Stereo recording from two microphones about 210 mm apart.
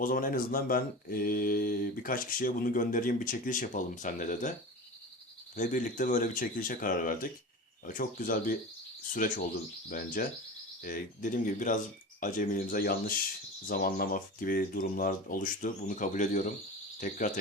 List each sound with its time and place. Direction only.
0.0 s speech: 40° left (ahead or behind)
5.5 s speech: 35° left (ahead or behind)